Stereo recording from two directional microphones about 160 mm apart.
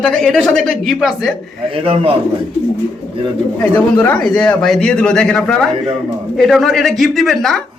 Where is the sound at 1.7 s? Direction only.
35° right (ahead or behind).